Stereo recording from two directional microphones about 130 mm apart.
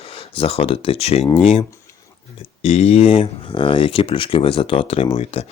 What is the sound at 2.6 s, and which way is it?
Speech, 55° left (ahead or behind).